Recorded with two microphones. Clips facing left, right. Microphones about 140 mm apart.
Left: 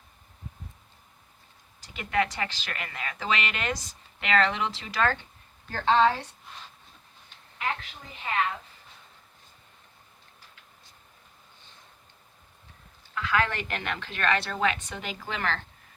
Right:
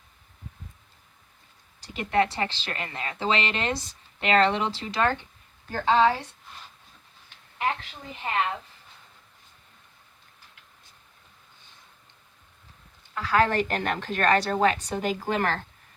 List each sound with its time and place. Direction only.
1.8 s a woman's voice: 30° right (ahead or behind); by 6.2 s 10° right (ahead or behind)
13.1 s a woman's voice: 35° right (ahead or behind)